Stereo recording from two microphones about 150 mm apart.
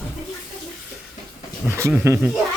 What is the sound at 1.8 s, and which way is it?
Speech, 20° right (ahead or behind).